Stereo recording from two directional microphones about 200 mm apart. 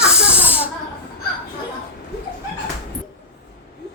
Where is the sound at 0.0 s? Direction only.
5° right (ahead or behind).